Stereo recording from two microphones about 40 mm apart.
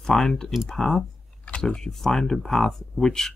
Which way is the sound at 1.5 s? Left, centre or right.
Left.